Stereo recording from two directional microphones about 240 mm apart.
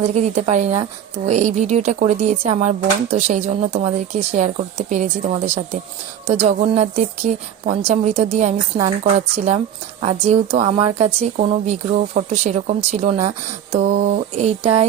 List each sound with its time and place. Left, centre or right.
0.1 s speech: right
6.4 s speech: right